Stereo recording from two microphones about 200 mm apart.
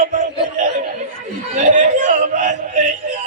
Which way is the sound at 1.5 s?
35° right (ahead or behind).